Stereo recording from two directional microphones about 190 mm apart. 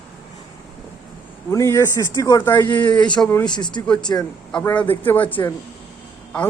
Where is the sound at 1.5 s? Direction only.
15° left (ahead or behind).